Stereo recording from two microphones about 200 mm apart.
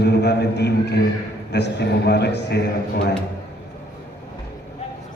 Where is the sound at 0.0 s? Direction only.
55° left (ahead or behind).